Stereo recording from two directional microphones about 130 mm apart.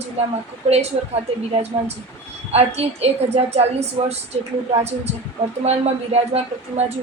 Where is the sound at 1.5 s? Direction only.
55° right (ahead or behind).